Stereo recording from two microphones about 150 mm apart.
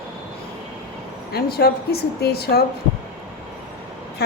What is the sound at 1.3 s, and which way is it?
A woman's voice, 90° left.